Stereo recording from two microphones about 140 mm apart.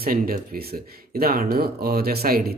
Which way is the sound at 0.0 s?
90° right.